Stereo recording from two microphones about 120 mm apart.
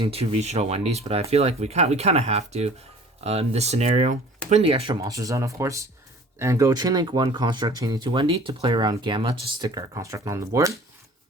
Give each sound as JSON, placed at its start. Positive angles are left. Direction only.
{"t": 0.0, "sound": "speech", "side_deg": -55}
{"t": 4.6, "sound": "speech", "side_deg": -50}
{"t": 5.0, "sound": "speech", "side_deg": -30}
{"t": 9.6, "sound": "speech", "side_deg": -30}